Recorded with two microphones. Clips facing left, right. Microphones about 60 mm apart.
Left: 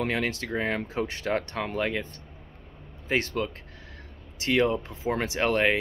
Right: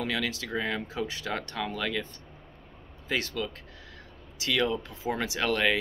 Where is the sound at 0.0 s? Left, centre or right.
Left.